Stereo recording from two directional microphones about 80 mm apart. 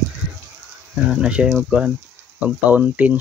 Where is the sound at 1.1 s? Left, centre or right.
Centre.